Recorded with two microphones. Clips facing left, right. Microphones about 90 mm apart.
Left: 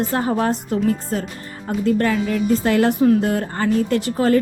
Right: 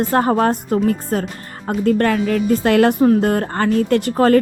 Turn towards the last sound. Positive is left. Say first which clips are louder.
# right 4 dB
turn(degrees=-55)  # may be behind; listen again after turning